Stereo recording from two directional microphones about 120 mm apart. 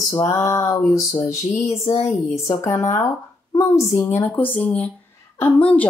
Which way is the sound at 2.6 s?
25° left (ahead or behind).